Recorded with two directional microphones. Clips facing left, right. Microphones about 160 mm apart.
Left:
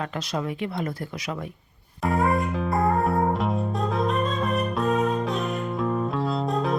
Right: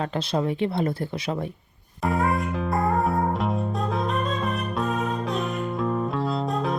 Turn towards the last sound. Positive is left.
turn(degrees=0)  # may be behind; listen again after turning